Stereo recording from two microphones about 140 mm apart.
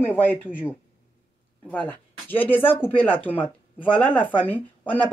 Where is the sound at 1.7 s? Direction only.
10° left (ahead or behind).